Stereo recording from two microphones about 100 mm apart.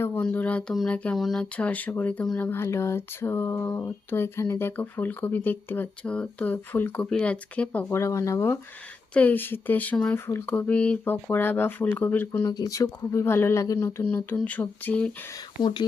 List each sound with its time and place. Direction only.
0.2 s speech: 15° left (ahead or behind)
1.1 s speech: 5° left (ahead or behind)
1.5 s speech: 15° left (ahead or behind)
7.9 s speech: 30° left (ahead or behind)
9.1 s speech: 15° left (ahead or behind)
12.5 s speech: 35° left (ahead or behind); by 15.1 s 15° left (ahead or behind)